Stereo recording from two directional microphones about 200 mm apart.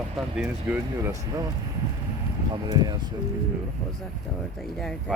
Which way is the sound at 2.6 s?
20° right (ahead or behind).